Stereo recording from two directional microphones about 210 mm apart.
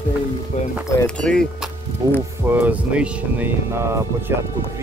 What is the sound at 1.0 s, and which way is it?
Speech, 5° left (ahead or behind).